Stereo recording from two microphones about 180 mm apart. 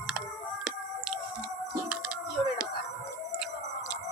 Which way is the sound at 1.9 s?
5° right (ahead or behind).